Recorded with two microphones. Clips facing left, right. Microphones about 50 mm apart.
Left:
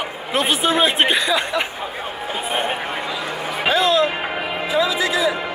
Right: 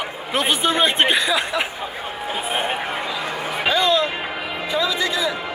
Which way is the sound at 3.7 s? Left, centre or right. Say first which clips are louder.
Left 2 dB; centre.